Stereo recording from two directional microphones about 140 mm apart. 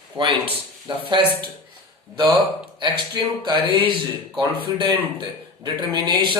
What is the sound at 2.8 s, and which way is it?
A man's voice, 35° right (ahead or behind).